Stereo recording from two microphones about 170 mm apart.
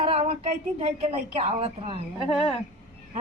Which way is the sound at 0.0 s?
35° right (ahead or behind).